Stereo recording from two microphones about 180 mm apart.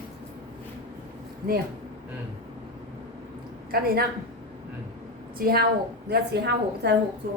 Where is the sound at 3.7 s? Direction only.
55° right (ahead or behind).